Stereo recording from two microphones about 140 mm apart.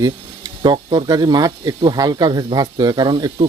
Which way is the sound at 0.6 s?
30° right (ahead or behind).